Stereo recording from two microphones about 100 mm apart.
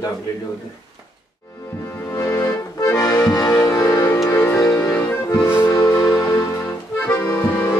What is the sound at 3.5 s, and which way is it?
Music, 35° left (ahead or behind).